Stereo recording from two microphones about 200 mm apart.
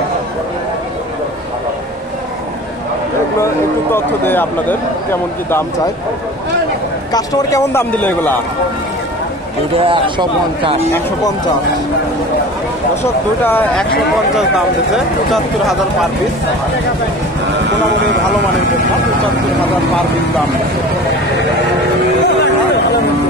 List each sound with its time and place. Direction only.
3.9 s speech: 10° left (ahead or behind)
7.1 s speech: 15° left (ahead or behind)
9.8 s a man's voice: 25° right (ahead or behind)
13.0 s speech: 10° left (ahead or behind)
15.3 s speech: centre (ahead or behind)